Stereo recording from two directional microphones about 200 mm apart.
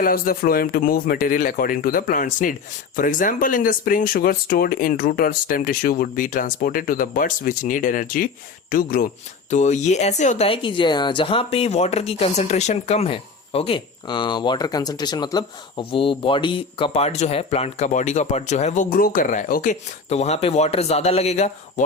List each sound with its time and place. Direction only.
0.0 s speech: 45° left (ahead or behind)